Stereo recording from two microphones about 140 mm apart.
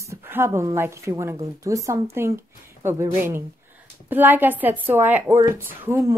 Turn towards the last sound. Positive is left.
turn(degrees=-20)  # may be behind; listen again after turning